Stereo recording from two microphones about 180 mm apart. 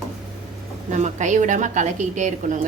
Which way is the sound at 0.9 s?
40° right (ahead or behind).